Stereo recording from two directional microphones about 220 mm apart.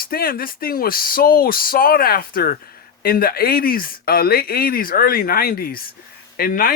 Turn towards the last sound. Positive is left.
turn(degrees=40)  # may be behind; listen again after turning